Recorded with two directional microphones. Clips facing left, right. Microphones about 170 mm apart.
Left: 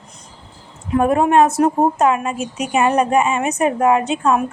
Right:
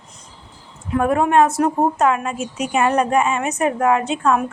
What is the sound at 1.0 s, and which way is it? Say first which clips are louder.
A woman's voice: left 2 dB; 20° left (ahead or behind).